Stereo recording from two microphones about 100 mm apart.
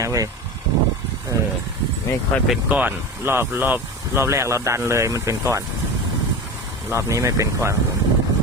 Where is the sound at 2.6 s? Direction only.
15° right (ahead or behind).